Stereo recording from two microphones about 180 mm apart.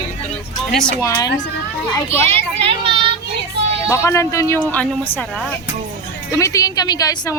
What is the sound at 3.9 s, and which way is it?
Speech, 15° left (ahead or behind).